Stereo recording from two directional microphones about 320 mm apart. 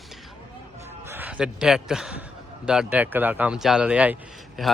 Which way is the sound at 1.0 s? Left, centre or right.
Centre.